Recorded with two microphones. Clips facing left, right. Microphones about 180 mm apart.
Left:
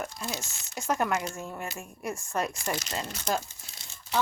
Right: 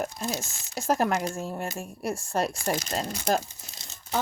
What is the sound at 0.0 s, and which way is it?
Speech, 45° right (ahead or behind).